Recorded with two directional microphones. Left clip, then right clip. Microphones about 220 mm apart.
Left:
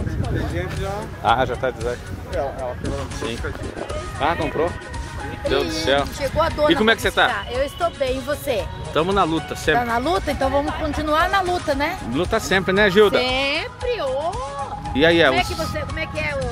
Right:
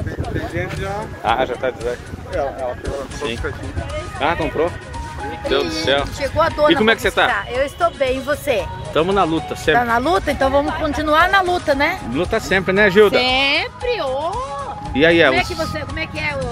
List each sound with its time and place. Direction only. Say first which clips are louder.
1.8 s speech: right 2 dB; centre (ahead or behind)
4.2 s speech: right 2 dB; centre (ahead or behind)
5.7 s speech: right 2 dB; 10° left (ahead or behind)
6.7 s speech: right 2 dB; centre (ahead or behind)
12.1 s speech: right 2 dB; 10° left (ahead or behind)
13.1 s speech: right 4 dB; 35° right (ahead or behind)
15.0 s speech: right 3 dB; 5° left (ahead or behind)
15.7 s music: right 1 dB; 45° right (ahead or behind)